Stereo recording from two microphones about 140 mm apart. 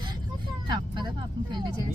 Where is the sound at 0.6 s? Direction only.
35° right (ahead or behind).